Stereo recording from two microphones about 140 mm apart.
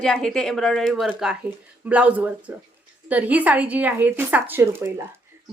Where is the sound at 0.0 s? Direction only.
5° left (ahead or behind).